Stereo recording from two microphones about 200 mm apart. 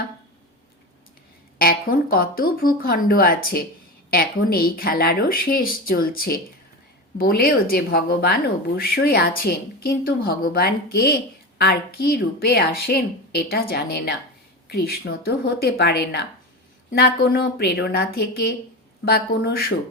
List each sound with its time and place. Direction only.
1.5 s speech: 50° left (ahead or behind)